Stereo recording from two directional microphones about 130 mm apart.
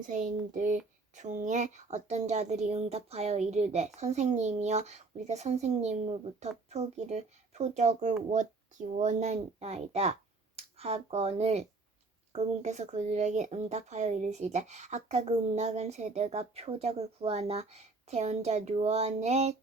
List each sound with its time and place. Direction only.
0.0 s speech: 75° right (ahead or behind); by 19.5 s 60° right (ahead or behind)